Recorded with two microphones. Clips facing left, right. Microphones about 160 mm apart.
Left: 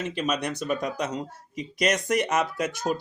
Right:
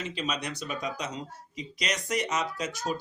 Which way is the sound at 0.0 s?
55° left (ahead or behind).